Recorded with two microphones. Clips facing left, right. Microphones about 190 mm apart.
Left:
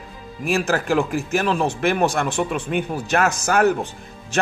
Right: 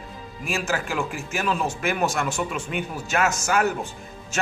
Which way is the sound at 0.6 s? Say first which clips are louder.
Left 6 dB; 40° left (ahead or behind).